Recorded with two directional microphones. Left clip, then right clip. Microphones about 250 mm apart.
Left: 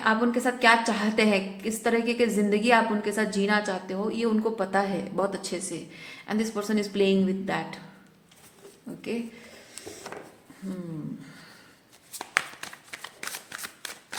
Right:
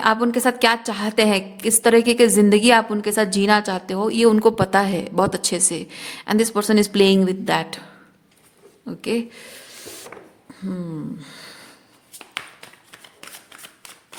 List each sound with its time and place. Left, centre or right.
0.0 s a woman's voice: right
9.0 s a woman's voice: right